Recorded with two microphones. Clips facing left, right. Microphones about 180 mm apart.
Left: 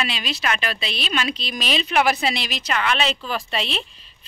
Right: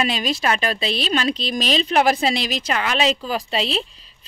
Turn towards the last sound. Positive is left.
turn(degrees=-35)  # may be behind; listen again after turning